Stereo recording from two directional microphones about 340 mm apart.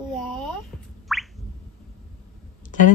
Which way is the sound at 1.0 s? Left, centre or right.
Centre.